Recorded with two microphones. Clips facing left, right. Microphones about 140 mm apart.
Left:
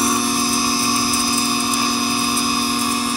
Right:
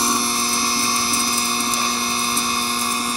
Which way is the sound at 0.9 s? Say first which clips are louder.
Left 4 dB; 5° left (ahead or behind).